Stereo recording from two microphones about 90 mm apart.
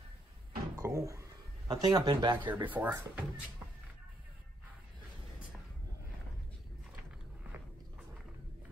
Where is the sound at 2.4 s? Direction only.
20° right (ahead or behind).